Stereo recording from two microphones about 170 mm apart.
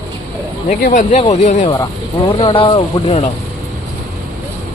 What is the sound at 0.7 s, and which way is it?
Speech, 50° left (ahead or behind).